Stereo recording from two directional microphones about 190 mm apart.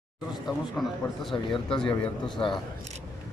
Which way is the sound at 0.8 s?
Centre (ahead or behind).